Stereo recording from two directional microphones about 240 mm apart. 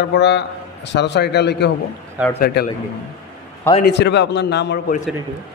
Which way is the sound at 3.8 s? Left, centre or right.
Left.